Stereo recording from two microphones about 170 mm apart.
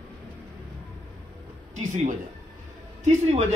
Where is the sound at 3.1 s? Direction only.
40° right (ahead or behind).